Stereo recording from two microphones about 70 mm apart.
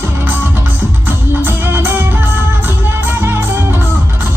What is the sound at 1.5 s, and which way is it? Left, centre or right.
Music, right.